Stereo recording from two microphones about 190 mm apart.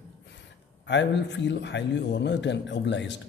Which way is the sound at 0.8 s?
65° left (ahead or behind).